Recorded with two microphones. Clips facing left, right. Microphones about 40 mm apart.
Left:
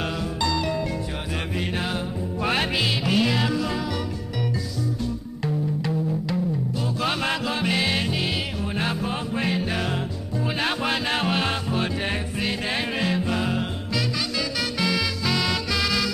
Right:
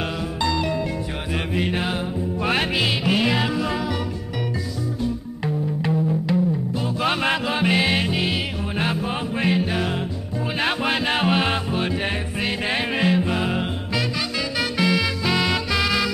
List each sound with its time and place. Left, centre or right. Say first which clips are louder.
0.4 s music: right 2 dB; centre
5.0 s music: right 3 dB; right